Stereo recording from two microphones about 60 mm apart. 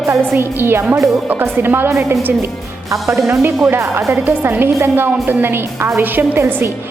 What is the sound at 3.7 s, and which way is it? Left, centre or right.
A woman's voice, right.